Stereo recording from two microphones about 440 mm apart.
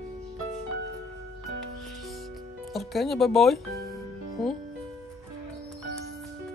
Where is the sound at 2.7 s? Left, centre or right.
Centre.